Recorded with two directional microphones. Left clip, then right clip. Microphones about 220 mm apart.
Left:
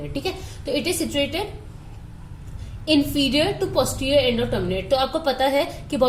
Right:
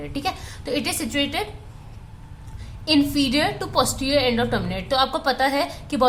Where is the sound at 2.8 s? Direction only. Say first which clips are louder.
Even; 15° right (ahead or behind).